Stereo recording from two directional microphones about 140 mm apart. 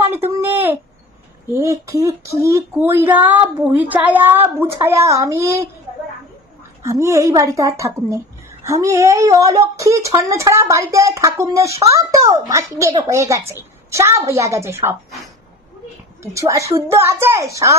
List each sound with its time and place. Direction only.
0.1 s a sound: 15° right (ahead or behind)
1.5 s a woman's voice: 20° right (ahead or behind)
6.8 s speech: 20° right (ahead or behind)
16.3 s speech: 20° right (ahead or behind)